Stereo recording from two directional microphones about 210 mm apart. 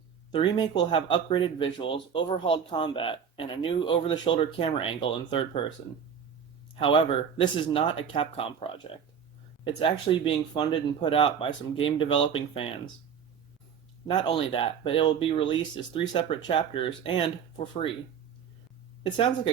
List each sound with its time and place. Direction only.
0.3 s speech: 20° left (ahead or behind)
6.7 s speech: 25° left (ahead or behind)
14.1 s speech: 20° left (ahead or behind)